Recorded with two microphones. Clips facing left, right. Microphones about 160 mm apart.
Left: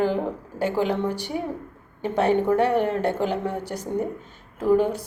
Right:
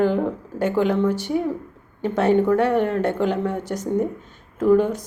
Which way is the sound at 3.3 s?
10° left (ahead or behind).